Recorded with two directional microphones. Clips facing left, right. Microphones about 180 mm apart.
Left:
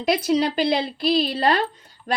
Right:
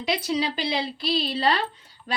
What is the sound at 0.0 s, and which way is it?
Speech, 50° left (ahead or behind).